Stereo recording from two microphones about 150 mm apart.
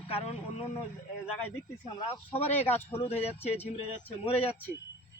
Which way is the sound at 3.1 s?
40° left (ahead or behind).